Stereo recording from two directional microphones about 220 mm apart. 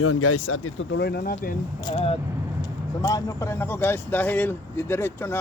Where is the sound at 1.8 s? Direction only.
25° left (ahead or behind).